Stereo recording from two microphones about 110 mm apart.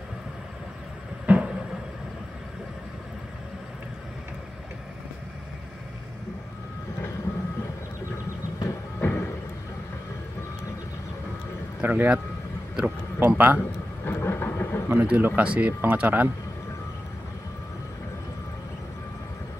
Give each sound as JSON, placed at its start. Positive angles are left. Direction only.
{"t": 1.2, "sound": "a sound", "side_deg": -10}
{"t": 9.0, "sound": "music", "side_deg": 20}
{"t": 11.8, "sound": "a man's voice", "side_deg": -15}
{"t": 14.0, "sound": "vehicle", "side_deg": 20}
{"t": 14.9, "sound": "speech", "side_deg": -15}